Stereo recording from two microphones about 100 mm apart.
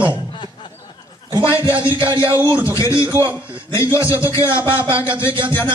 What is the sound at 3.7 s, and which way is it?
Speech, 30° left (ahead or behind).